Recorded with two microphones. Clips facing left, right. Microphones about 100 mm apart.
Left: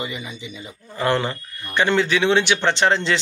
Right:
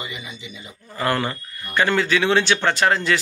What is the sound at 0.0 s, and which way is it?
A man's voice, 30° left (ahead or behind).